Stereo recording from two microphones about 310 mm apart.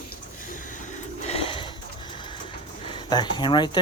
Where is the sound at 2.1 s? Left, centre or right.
Centre.